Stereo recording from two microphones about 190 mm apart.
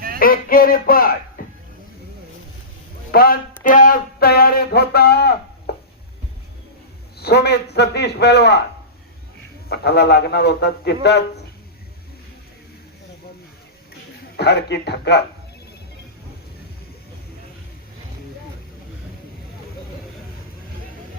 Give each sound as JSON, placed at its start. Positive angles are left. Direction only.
{"t": 0.2, "sound": "speech", "side_deg": 50}
{"t": 3.1, "sound": "speech", "side_deg": 50}
{"t": 5.7, "sound": "a sound", "side_deg": 55}
{"t": 7.2, "sound": "speech", "side_deg": 60}
{"t": 9.6, "sound": "speech", "side_deg": 60}
{"t": 14.3, "sound": "speech", "side_deg": 60}